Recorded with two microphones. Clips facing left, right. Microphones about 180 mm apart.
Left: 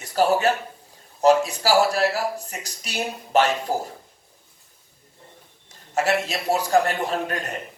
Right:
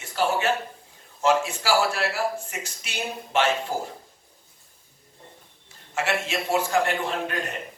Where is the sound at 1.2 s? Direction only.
40° left (ahead or behind).